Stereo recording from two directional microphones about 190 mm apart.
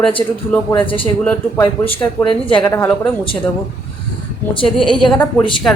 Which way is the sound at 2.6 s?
10° left (ahead or behind).